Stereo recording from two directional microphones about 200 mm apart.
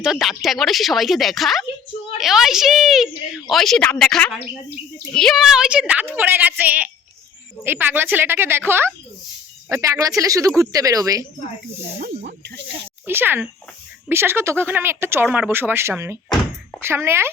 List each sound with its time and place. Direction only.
0.0 s a woman's voice: centre (ahead or behind)
11.9 s speech: 55° right (ahead or behind)
13.1 s speech: 10° right (ahead or behind)